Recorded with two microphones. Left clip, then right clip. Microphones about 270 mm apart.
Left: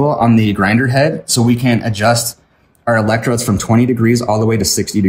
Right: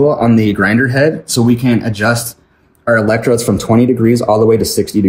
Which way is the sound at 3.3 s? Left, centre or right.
Left.